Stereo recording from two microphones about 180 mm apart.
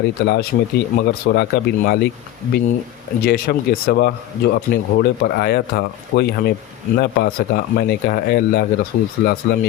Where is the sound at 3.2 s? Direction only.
60° left (ahead or behind).